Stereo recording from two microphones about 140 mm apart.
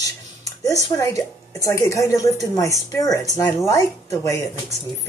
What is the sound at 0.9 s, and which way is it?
A woman's voice, 25° left (ahead or behind).